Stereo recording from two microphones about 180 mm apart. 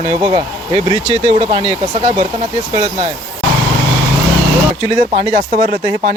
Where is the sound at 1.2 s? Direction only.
40° right (ahead or behind).